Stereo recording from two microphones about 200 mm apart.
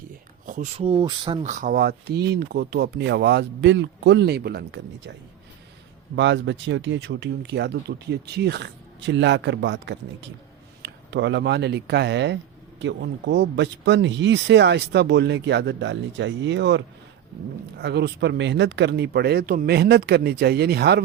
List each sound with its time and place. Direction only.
0.4 s speech: 40° right (ahead or behind)
0.9 s speech: 25° right (ahead or behind)
1.5 s speech: 40° right (ahead or behind); by 5.1 s 60° right (ahead or behind)
6.1 s speech: 65° right (ahead or behind)